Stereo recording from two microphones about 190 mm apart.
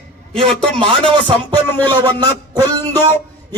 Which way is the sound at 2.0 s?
20° right (ahead or behind).